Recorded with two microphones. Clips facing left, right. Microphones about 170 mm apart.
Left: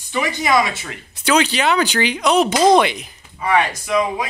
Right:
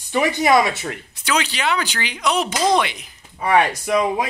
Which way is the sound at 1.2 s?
25° left (ahead or behind).